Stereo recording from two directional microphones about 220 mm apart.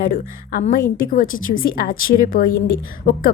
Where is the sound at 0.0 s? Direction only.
40° left (ahead or behind).